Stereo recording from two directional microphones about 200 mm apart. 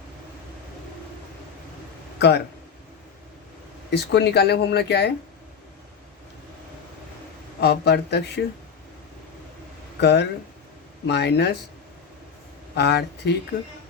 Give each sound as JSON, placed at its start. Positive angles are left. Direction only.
{"t": 2.1, "sound": "speech", "side_deg": 55}
{"t": 3.9, "sound": "speech", "side_deg": 55}
{"t": 7.6, "sound": "speech", "side_deg": 55}
{"t": 10.0, "sound": "speech", "side_deg": 55}
{"t": 12.7, "sound": "speech", "side_deg": 55}